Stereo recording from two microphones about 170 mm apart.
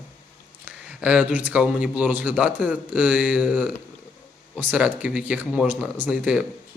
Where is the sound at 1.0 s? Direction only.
5° right (ahead or behind).